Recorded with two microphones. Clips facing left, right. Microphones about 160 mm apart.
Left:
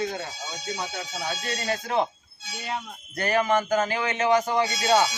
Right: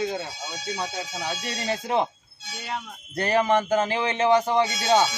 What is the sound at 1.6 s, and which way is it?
Speech, 20° right (ahead or behind).